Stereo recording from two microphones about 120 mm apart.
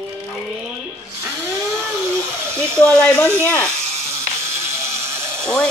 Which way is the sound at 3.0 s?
5° left (ahead or behind).